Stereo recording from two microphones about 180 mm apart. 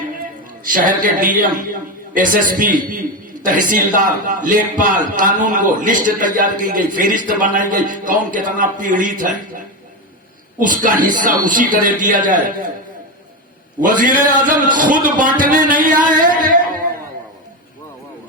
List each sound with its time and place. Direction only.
0.6 s a man's voice: 50° right (ahead or behind)
13.8 s a man's voice: 50° right (ahead or behind)